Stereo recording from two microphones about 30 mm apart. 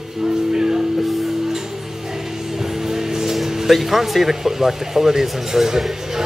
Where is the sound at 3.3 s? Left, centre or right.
Centre.